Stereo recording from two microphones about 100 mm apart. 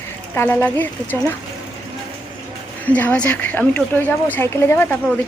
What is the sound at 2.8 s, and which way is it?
A woman's voice, 15° left (ahead or behind).